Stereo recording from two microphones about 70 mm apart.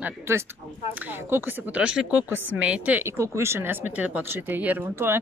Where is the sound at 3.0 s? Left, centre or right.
Right.